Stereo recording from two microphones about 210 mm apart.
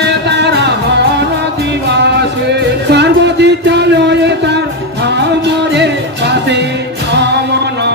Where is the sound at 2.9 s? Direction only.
55° right (ahead or behind).